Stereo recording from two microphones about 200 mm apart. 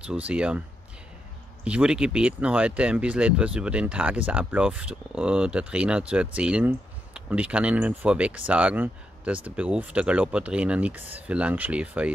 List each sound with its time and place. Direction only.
0.0 s speech: 5° right (ahead or behind)